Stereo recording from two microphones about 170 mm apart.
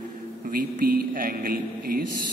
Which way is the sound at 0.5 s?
60° right (ahead or behind).